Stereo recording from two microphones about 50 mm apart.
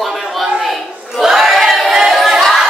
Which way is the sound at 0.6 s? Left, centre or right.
Centre.